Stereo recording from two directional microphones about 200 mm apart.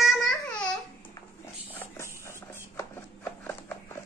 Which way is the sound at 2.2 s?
15° left (ahead or behind).